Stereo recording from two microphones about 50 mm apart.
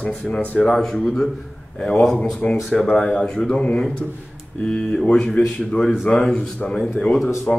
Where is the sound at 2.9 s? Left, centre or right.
Centre.